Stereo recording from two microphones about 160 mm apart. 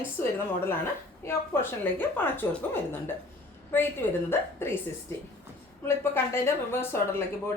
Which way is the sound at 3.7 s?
15° left (ahead or behind).